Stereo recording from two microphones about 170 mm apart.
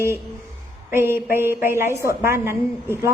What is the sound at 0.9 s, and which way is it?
A woman's voice, 15° right (ahead or behind).